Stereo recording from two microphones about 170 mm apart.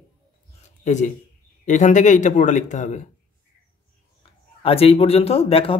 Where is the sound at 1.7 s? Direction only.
45° left (ahead or behind).